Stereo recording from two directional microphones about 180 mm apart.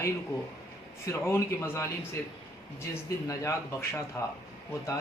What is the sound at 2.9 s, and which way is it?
Speech, 15° left (ahead or behind).